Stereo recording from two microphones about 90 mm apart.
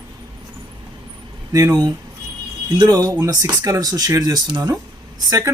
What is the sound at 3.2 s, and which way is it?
Speech, 40° right (ahead or behind).